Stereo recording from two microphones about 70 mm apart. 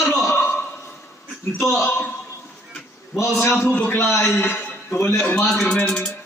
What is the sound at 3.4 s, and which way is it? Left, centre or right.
Speech, left.